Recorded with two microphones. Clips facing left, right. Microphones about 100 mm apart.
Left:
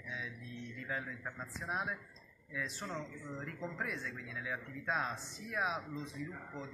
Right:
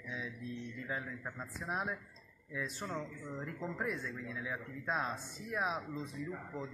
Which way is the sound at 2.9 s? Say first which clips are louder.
Right 2 dB; 10° right (ahead or behind).